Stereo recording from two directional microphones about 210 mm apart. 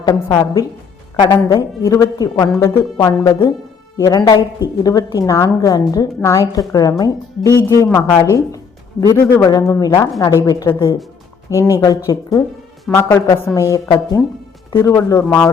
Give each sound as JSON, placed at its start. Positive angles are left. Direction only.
{"t": 0.0, "sound": "a woman's voice", "side_deg": 20}